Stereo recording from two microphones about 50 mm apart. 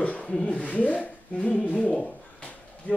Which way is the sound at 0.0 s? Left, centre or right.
Left.